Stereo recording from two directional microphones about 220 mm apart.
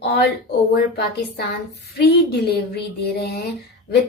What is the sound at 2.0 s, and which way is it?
A woman's voice, 45° left (ahead or behind).